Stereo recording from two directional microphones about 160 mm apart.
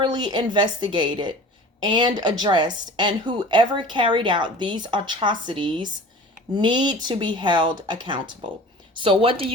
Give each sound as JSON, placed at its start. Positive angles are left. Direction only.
{"t": 0.0, "sound": "a woman's voice", "side_deg": -30}